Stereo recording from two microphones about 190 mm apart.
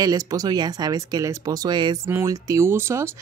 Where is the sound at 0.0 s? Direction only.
20° right (ahead or behind).